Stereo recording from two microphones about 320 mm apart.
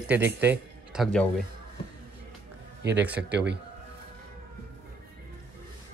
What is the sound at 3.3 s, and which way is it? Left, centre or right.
Speech, right.